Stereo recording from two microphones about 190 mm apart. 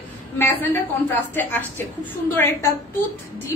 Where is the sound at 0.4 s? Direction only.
10° left (ahead or behind).